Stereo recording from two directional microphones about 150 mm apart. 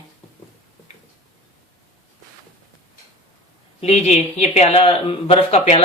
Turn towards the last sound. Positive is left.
turn(degrees=45)  # may be behind; listen again after turning